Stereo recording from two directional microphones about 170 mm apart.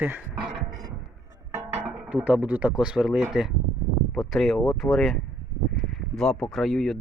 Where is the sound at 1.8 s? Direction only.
5° right (ahead or behind).